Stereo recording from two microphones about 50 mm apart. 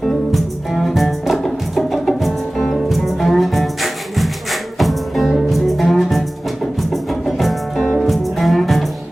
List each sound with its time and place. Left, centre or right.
0.0 s music: centre